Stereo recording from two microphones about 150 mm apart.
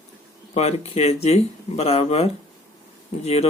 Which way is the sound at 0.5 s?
45° left (ahead or behind).